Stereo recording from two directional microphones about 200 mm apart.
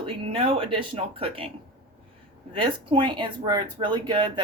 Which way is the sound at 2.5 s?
25° right (ahead or behind).